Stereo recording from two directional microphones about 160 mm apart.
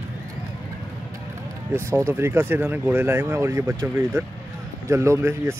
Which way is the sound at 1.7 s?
15° right (ahead or behind).